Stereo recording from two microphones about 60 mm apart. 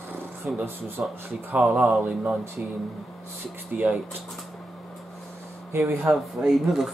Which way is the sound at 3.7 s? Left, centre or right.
Right.